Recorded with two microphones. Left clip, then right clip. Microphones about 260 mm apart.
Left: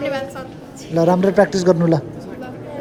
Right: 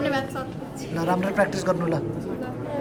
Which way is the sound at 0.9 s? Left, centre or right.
Left.